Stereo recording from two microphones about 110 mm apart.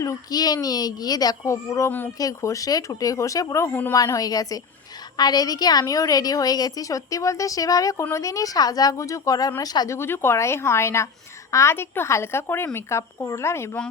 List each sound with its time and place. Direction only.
0.0 s a woman's voice: 35° left (ahead or behind)
3.7 s speech: 15° left (ahead or behind)
3.9 s a woman's voice: 35° left (ahead or behind)
10.0 s a woman's voice: 20° left (ahead or behind)